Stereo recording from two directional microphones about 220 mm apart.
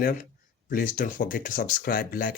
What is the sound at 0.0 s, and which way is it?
Speech, 40° left (ahead or behind).